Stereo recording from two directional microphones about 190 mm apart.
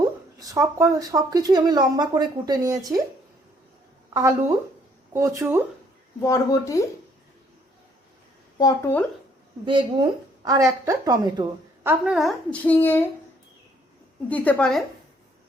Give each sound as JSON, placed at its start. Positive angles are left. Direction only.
{"t": 0.3, "sound": "speech", "side_deg": -20}
{"t": 4.1, "sound": "a woman's voice", "side_deg": -15}
{"t": 6.2, "sound": "speech", "side_deg": 15}
{"t": 8.5, "sound": "speech", "side_deg": 20}
{"t": 9.6, "sound": "speech", "side_deg": -25}
{"t": 12.1, "sound": "speech", "side_deg": 5}
{"t": 14.3, "sound": "a woman's voice", "side_deg": 10}